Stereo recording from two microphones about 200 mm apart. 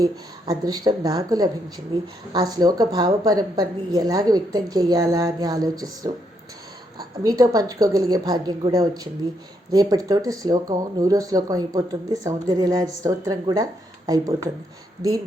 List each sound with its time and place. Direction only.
0.0 s a woman's voice: 20° right (ahead or behind)
7.3 s speech: 15° right (ahead or behind)